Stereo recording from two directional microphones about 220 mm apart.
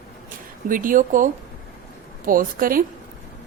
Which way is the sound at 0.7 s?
40° right (ahead or behind).